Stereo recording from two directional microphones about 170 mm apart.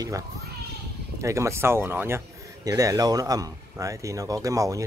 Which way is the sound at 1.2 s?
15° right (ahead or behind).